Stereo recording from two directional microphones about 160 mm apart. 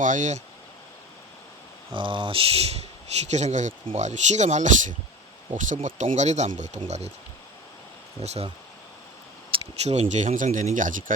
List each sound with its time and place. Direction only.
0.0 s speech: 50° right (ahead or behind)
1.9 s speech: 30° right (ahead or behind)
8.2 s speech: 40° right (ahead or behind)
9.5 s speech: 40° right (ahead or behind)